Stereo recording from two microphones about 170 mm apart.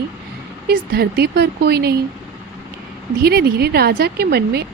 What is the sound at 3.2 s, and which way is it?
Speech, 70° right (ahead or behind).